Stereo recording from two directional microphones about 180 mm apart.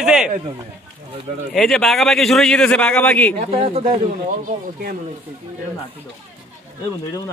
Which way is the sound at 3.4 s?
35° right (ahead or behind).